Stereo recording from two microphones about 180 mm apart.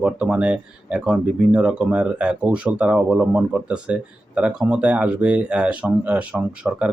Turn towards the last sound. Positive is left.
turn(degrees=-5)  # may be behind; listen again after turning